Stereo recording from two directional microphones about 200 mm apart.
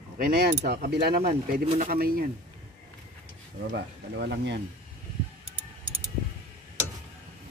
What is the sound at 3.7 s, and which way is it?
Speech, 55° right (ahead or behind).